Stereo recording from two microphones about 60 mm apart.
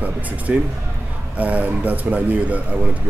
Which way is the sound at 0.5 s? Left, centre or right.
Centre.